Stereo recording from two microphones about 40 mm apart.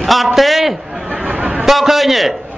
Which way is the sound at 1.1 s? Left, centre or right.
Right.